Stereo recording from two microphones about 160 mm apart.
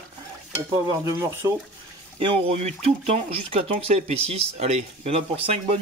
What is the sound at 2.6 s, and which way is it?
Speech, 45° right (ahead or behind).